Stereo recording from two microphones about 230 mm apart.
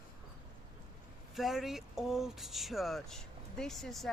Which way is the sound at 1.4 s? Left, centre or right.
Centre.